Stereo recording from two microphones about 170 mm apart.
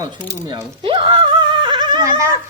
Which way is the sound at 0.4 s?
30° right (ahead or behind).